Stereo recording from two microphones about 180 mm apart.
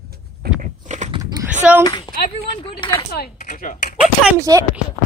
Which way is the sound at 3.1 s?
55° left (ahead or behind).